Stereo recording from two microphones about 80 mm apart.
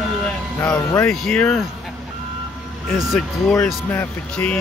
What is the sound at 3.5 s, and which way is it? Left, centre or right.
Speech, left.